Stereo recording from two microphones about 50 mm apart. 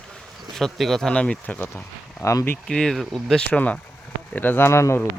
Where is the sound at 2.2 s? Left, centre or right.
Left.